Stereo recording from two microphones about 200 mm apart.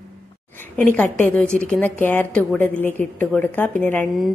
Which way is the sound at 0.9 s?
5° left (ahead or behind).